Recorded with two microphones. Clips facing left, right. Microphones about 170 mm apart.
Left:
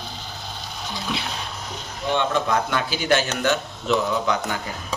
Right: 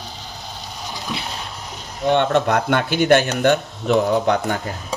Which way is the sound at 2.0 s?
60° right (ahead or behind).